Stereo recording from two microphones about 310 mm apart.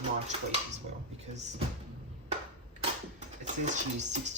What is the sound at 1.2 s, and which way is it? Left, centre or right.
Speech, right.